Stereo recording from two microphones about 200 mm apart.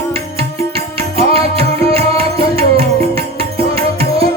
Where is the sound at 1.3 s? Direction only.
30° right (ahead or behind).